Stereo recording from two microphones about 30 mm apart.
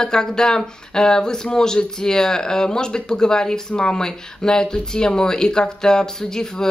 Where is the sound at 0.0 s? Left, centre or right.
Left.